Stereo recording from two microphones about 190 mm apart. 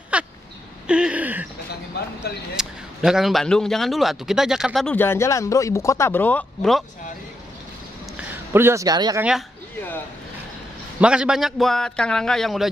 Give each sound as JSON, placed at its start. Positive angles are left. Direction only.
{"t": 0.1, "sound": "crow", "side_deg": -5}
{"t": 0.8, "sound": "a sound", "side_deg": -5}
{"t": 2.5, "sound": "a man's voice", "side_deg": -5}
{"t": 8.2, "sound": "a man's voice", "side_deg": -10}
{"t": 11.0, "sound": "a man's voice", "side_deg": -5}